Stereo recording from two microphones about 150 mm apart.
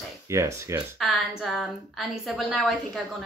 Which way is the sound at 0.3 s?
20° right (ahead or behind).